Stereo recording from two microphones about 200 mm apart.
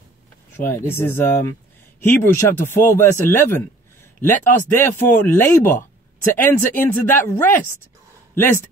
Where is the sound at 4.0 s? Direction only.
10° left (ahead or behind).